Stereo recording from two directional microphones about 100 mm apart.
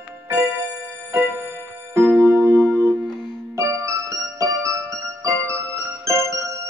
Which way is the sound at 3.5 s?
30° right (ahead or behind).